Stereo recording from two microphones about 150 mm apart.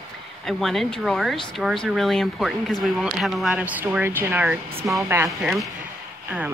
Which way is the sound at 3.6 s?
10° right (ahead or behind).